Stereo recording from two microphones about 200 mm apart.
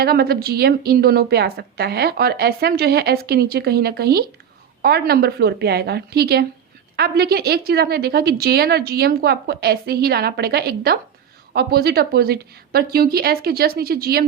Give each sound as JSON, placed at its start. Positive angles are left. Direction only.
{"t": 0.0, "sound": "a woman's voice", "side_deg": -50}